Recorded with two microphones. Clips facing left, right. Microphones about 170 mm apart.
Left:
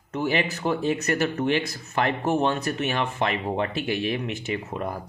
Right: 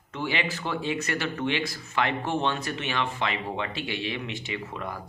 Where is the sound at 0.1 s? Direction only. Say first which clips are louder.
Left 5 dB; 45° left (ahead or behind).